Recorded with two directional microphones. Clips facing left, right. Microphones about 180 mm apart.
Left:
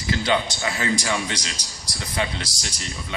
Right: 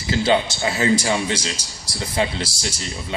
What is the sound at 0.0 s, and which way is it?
A man's voice, 30° right (ahead or behind).